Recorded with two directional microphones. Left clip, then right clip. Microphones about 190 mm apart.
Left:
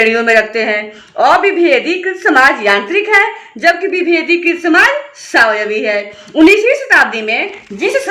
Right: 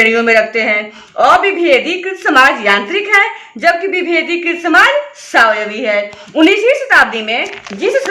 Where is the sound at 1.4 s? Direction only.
45° right (ahead or behind).